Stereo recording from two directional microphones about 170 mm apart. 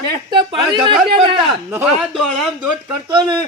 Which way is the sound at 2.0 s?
Centre (ahead or behind).